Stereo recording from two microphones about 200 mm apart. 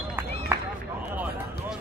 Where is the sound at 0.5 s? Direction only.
10° right (ahead or behind).